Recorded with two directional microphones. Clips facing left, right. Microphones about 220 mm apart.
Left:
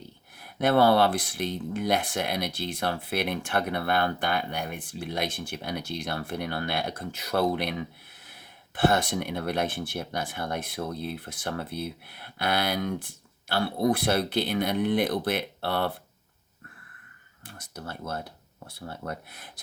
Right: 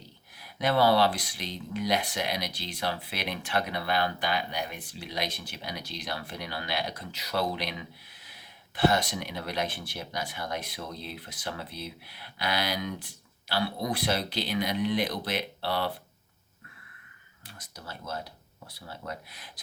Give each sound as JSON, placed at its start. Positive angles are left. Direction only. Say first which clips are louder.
{"t": 0.3, "sound": "speech", "louder": "left 4 dB", "side_deg": 55}
{"t": 17.4, "sound": "speech", "louder": "left 6 dB", "side_deg": 50}